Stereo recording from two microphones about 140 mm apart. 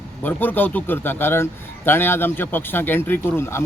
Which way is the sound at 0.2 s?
15° left (ahead or behind).